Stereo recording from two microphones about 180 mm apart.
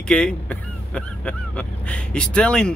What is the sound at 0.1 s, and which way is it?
Speech, 5° left (ahead or behind).